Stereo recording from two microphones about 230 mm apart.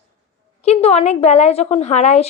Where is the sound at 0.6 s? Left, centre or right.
Left.